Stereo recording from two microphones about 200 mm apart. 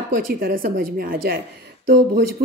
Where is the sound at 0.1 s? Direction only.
45° right (ahead or behind).